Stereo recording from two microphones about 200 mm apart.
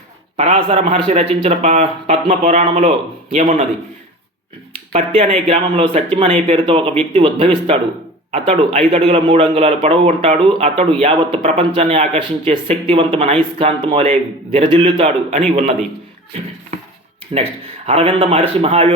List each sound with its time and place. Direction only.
0.3 s speech: 30° right (ahead or behind)
4.9 s a man's voice: 30° right (ahead or behind)